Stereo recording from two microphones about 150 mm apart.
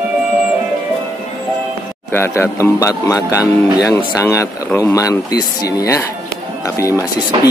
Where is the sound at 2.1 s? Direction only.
15° left (ahead or behind).